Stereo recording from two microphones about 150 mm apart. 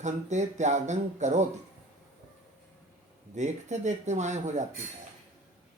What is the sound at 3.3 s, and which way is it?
Speech, 50° right (ahead or behind).